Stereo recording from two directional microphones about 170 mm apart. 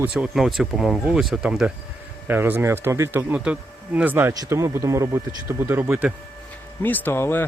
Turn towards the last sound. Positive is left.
turn(degrees=15)  # may be behind; listen again after turning